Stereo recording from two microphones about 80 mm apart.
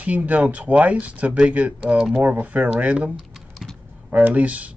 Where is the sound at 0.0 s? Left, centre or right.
Centre.